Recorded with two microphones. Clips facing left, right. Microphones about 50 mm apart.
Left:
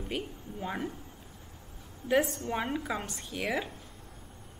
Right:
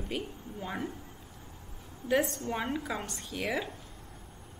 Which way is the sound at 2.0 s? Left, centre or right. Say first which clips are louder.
Left 1 dB; centre.